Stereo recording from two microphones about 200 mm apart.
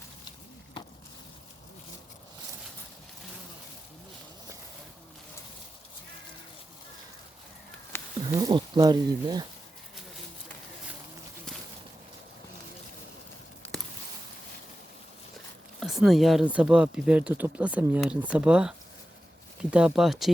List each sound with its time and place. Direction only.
7.9 s a sound: 10° left (ahead or behind)
8.3 s speech: 20° right (ahead or behind)
15.8 s speech: centre (ahead or behind)
19.7 s speech: 5° right (ahead or behind)